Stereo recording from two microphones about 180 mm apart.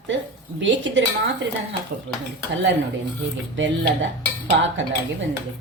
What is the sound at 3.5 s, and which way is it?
Speech, 90° right.